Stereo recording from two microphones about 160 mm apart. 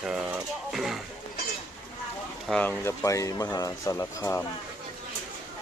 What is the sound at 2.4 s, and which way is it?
Speech, 5° left (ahead or behind).